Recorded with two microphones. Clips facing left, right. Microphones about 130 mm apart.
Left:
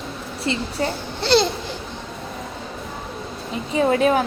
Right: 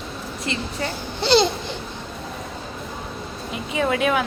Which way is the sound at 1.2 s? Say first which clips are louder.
Even; centre (ahead or behind).